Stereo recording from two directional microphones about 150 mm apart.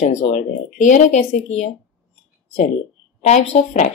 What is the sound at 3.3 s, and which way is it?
Speech, 50° left (ahead or behind).